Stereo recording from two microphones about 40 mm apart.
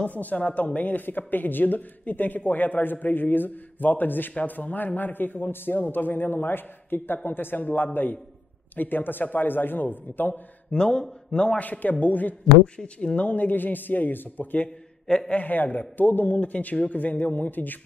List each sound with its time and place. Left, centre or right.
0.1 s speech: left
10.8 s speech: centre
11.5 s a man's voice: left
12.7 s speech: left
13.3 s speech: left
15.1 s a man's voice: centre
15.4 s a man's voice: left